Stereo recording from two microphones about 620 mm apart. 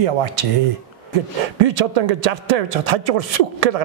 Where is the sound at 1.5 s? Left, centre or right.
Right.